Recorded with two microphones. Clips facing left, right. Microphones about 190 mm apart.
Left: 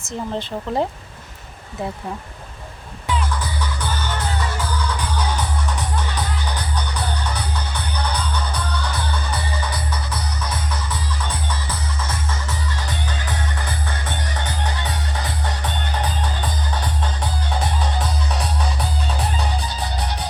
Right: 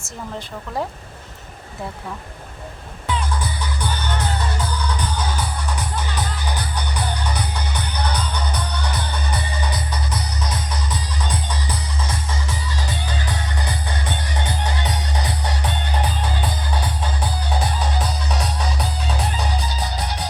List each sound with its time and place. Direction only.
0.0 s speech: 25° left (ahead or behind)
8.8 s music: 20° right (ahead or behind)
12.0 s music: 15° right (ahead or behind)
18.3 s music: centre (ahead or behind)